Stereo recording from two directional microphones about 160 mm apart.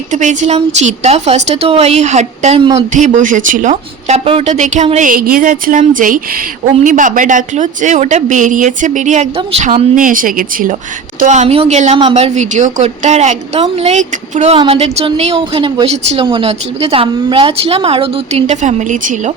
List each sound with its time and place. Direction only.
0.1 s speech: 50° right (ahead or behind)
2.6 s speech: 25° right (ahead or behind)
2.9 s speech: 50° right (ahead or behind)
11.2 s a woman's voice: 50° right (ahead or behind)